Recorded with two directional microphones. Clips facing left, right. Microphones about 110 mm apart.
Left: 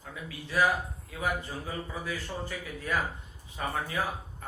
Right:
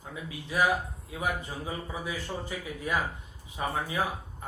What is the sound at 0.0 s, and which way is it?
A man's voice, 20° right (ahead or behind).